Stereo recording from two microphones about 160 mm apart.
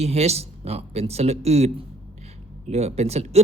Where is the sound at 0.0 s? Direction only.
40° right (ahead or behind).